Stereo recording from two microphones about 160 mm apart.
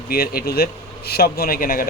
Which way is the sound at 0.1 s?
70° left (ahead or behind).